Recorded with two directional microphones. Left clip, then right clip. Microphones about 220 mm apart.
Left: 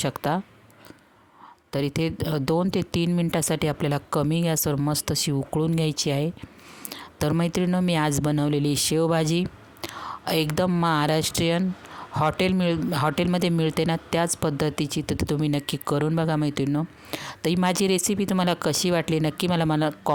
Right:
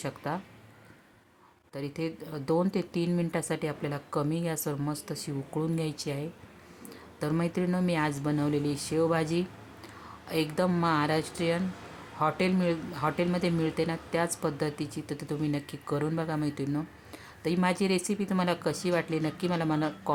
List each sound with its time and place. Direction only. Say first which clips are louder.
0.0 s speech: left 9 dB; 45° left (ahead or behind)
1.7 s speech: left 9 dB; 45° left (ahead or behind)